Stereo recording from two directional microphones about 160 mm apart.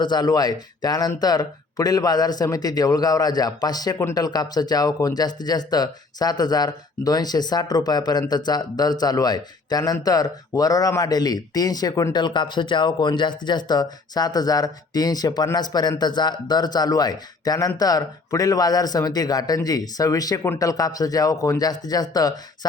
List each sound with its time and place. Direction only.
0.0 s speech: 25° left (ahead or behind)